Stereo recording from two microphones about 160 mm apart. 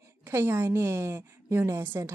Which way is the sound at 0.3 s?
15° right (ahead or behind).